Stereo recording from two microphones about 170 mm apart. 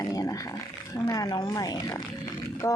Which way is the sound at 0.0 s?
20° left (ahead or behind).